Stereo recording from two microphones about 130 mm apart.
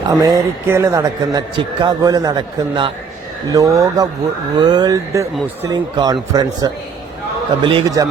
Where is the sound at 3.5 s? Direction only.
25° right (ahead or behind).